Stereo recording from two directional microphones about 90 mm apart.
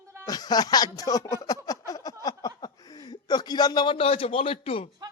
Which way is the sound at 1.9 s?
45° left (ahead or behind).